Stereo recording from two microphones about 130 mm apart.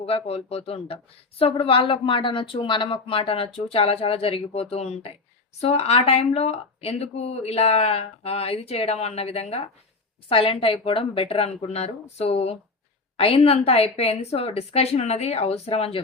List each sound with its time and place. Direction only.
0.0 s speech: 50° left (ahead or behind)